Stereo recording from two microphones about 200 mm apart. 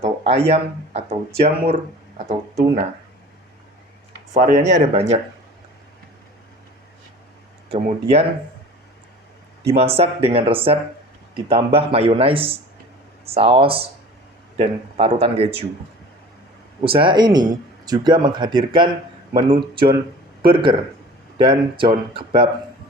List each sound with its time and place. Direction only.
0.0 s speech: 30° right (ahead or behind)
4.4 s speech: 35° right (ahead or behind)
7.7 s speech: 30° right (ahead or behind)
9.6 s speech: 30° right (ahead or behind)
16.8 s speech: 25° right (ahead or behind)